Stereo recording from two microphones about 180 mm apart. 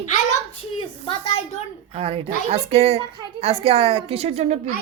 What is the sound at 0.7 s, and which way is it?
Speech, 30° left (ahead or behind).